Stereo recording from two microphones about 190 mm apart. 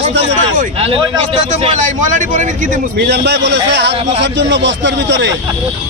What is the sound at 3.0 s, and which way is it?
A man's voice, 60° right (ahead or behind).